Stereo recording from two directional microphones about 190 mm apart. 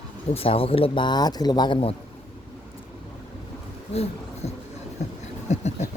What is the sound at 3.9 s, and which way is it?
Speech, 35° left (ahead or behind).